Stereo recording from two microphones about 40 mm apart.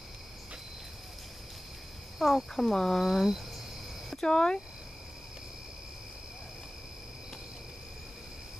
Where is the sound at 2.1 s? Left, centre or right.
Centre.